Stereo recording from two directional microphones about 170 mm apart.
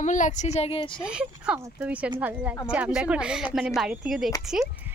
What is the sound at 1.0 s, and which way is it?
Speech, 5° right (ahead or behind).